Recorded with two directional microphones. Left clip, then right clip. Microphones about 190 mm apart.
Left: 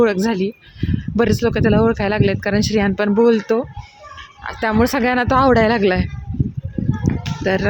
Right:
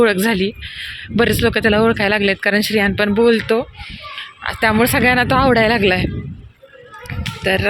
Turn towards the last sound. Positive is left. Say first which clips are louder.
# right 2 dB
turn(degrees=15)  # may be behind; listen again after turning